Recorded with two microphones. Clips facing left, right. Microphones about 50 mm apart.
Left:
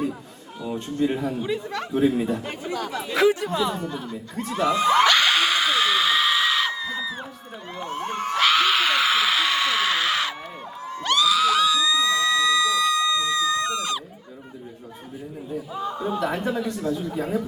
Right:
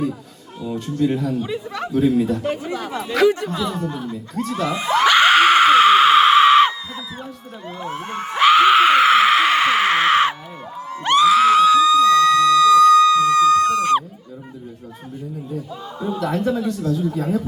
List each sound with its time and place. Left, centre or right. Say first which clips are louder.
0.6 s speech: right 3 dB; centre
1.4 s speech: right 2 dB; centre
1.9 s speech: right 4 dB; left
2.6 s speech: right 2 dB; centre
3.0 s speech: right 3 dB; centre
5.0 s screaming: right 5 dB; right
5.3 s a sound: right 9 dB; right
7.8 s a sound: even; centre; by 14.0 s right
15.7 s a sound: left 2 dB; centre